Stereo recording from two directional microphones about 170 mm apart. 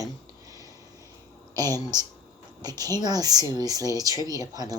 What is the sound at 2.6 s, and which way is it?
Speech, 20° right (ahead or behind).